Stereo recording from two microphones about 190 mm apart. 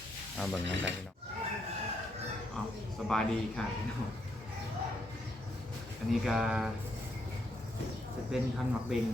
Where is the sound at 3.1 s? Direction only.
5° left (ahead or behind).